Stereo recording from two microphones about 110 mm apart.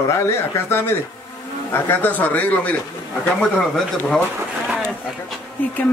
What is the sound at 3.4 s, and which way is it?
Speech, 5° left (ahead or behind).